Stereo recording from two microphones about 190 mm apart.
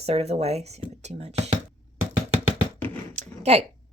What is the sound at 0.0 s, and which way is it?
Speech, 35° right (ahead or behind).